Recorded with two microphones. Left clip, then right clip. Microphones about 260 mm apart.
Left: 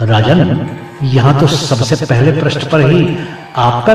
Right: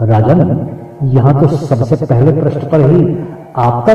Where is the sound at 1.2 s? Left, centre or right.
Left.